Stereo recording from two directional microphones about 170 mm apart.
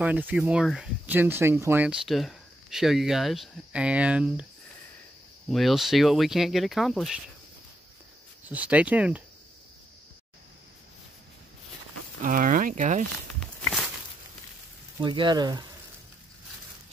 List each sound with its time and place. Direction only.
0.0 s speech: 10° right (ahead or behind)
2.0 s speech: centre (ahead or behind)
5.5 s speech: centre (ahead or behind)
8.5 s speech: 10° right (ahead or behind)
12.2 s speech: 50° right (ahead or behind)
15.0 s speech: 25° right (ahead or behind)